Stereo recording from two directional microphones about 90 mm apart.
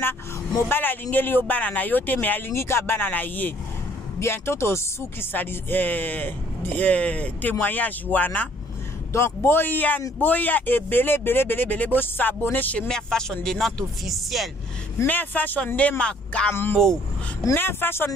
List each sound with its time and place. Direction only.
0.7 s speech: 20° left (ahead or behind)
12.8 s speech: 5° left (ahead or behind)
15.0 s speech: 20° left (ahead or behind)
17.6 s speech: 25° left (ahead or behind)